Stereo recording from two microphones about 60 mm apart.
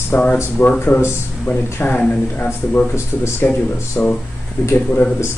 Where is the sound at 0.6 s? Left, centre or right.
Left.